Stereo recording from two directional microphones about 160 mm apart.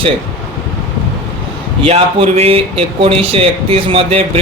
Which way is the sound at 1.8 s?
35° right (ahead or behind).